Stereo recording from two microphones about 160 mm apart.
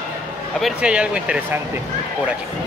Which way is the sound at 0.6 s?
5° right (ahead or behind).